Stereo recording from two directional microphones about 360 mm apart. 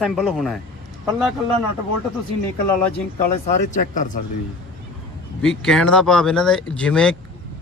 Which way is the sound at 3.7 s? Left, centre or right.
Left.